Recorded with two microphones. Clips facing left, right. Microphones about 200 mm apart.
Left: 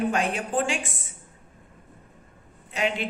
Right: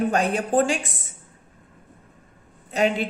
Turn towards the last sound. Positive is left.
turn(degrees=-40)  # may be behind; listen again after turning